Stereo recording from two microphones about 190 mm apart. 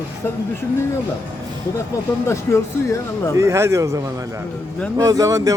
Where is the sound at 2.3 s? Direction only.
15° left (ahead or behind).